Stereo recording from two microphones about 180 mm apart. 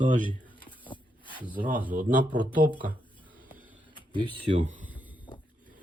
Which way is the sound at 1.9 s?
50° right (ahead or behind).